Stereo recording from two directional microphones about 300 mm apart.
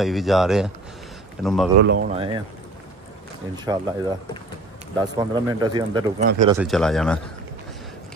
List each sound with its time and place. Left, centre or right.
0.0 s speech: centre
1.8 s speech: right
2.1 s speech: centre
3.7 s speech: centre
4.9 s speech: centre
6.5 s speech: centre